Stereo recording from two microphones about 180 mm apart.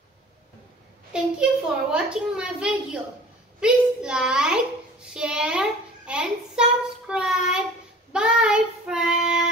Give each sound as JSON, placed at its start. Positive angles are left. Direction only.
{"t": 1.1, "sound": "a child's voice", "side_deg": -5}
{"t": 7.1, "sound": "child singing", "side_deg": -5}